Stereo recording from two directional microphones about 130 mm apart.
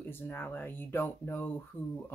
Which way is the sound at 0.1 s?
15° left (ahead or behind).